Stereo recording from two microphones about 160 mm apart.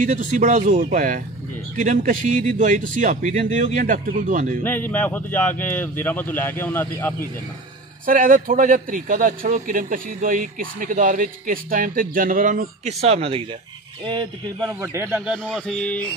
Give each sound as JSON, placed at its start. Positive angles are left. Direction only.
{"t": 0.0, "sound": "a man's voice", "side_deg": -50}
{"t": 4.6, "sound": "speech", "side_deg": 10}
{"t": 8.0, "sound": "a man's voice", "side_deg": -60}
{"t": 14.7, "sound": "a man's voice", "side_deg": -15}
{"t": 15.3, "sound": "mantra", "side_deg": 0}